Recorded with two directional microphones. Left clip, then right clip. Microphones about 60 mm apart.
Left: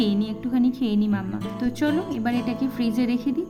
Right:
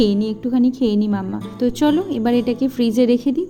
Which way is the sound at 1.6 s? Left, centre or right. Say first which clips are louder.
Right 7 dB; right.